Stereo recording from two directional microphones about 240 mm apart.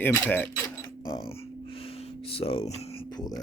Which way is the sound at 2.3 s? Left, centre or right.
Left.